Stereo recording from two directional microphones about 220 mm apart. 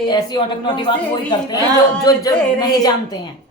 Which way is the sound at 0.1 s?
20° left (ahead or behind).